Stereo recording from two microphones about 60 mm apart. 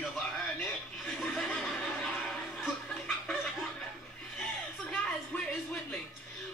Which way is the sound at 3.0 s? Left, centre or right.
Centre.